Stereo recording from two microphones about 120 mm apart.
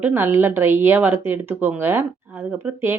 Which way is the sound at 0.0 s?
15° right (ahead or behind).